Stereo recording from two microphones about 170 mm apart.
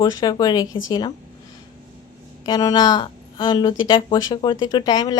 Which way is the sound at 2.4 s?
25° left (ahead or behind).